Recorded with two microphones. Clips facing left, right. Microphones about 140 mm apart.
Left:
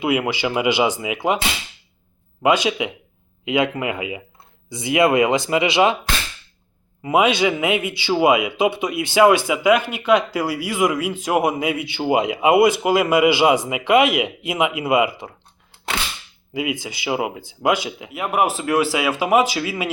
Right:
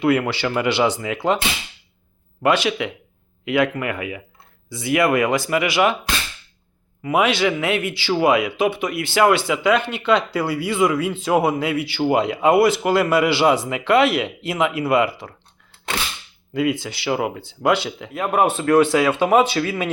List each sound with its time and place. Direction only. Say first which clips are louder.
0.0 s speech: right 2 dB; 15° left (ahead or behind)
2.4 s speech: left 1 dB; 15° left (ahead or behind)
7.0 s speech: left 1 dB; 20° left (ahead or behind)
16.6 s speech: right 4 dB; 15° left (ahead or behind)